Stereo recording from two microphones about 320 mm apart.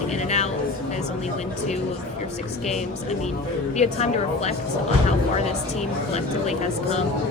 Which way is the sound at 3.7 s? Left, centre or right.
Left.